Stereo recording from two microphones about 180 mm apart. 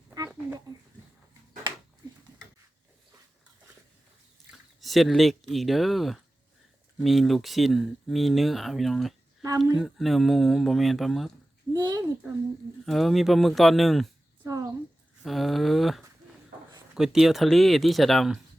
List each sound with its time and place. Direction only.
0.1 s a sound: 15° right (ahead or behind)
4.8 s speech: centre (ahead or behind)
11.7 s speech: 20° right (ahead or behind)
12.8 s speech: centre (ahead or behind)
14.4 s a sound: 20° right (ahead or behind)
15.2 s speech: centre (ahead or behind)